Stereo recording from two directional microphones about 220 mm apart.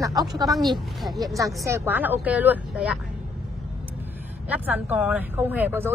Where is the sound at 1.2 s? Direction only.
15° right (ahead or behind).